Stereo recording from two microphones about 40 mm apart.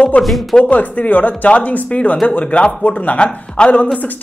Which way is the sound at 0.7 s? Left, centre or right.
Left.